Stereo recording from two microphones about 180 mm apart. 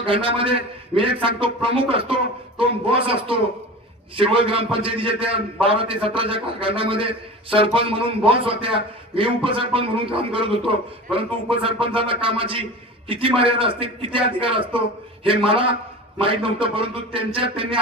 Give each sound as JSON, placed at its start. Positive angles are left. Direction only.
{"t": 0.0, "sound": "a man's voice", "side_deg": -30}